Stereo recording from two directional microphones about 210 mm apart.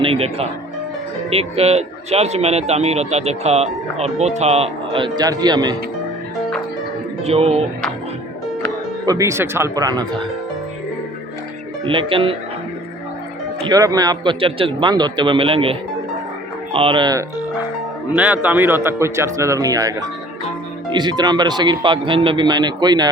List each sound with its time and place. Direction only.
0.0 s music: 25° right (ahead or behind)
1.3 s speech: 30° right (ahead or behind)
7.3 s speech: 30° right (ahead or behind)
9.0 s speech: 15° right (ahead or behind)
11.9 s speech: 25° right (ahead or behind)
13.7 s speech: 15° right (ahead or behind)
18.1 s speech: 5° right (ahead or behind)
20.9 s speech: 20° right (ahead or behind)